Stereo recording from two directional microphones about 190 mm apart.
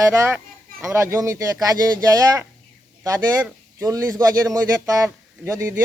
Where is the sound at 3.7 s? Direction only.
15° right (ahead or behind).